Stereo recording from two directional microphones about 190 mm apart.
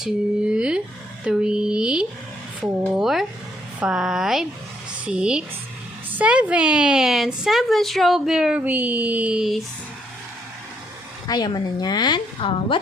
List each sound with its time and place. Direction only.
0.0 s a sound: 5° right (ahead or behind)
1.2 s a woman's voice: 5° right (ahead or behind)
11.3 s a woman's voice: 20° left (ahead or behind)